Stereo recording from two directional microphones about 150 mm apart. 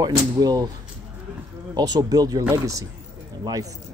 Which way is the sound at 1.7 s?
25° right (ahead or behind).